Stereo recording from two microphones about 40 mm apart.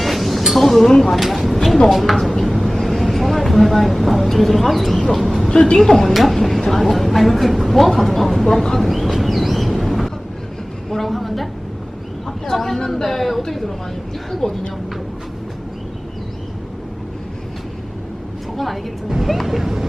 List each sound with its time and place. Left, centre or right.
0.0 s a sound: centre
0.9 s a woman's voice: centre
1.1 s a woman's voice: centre
2.5 s vehicle: centre
2.8 s speech: centre
5.5 s a woman's voice: left; by 8.6 s centre
8.8 s a sound: centre
12.5 s a woman's voice: centre
18.5 s a woman's voice: centre